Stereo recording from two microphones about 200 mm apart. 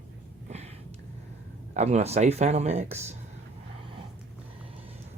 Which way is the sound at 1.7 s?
35° right (ahead or behind).